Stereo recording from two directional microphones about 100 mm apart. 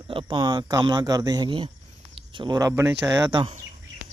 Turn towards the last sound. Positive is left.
turn(degrees=-40)  # may be behind; listen again after turning